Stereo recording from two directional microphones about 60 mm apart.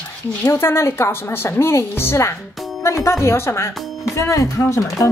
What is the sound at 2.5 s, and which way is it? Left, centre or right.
Music, centre.